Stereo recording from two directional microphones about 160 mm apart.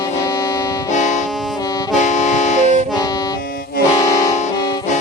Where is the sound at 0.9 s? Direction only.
50° left (ahead or behind).